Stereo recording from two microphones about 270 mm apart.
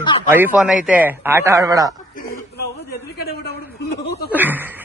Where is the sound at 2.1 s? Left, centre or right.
Left.